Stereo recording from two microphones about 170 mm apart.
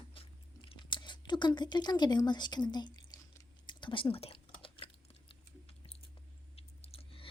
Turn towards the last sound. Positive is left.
turn(degrees=35)  # may be behind; listen again after turning